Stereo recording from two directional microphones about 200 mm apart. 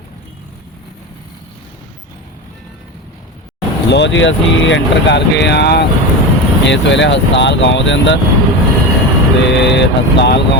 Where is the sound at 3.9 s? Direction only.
60° left (ahead or behind).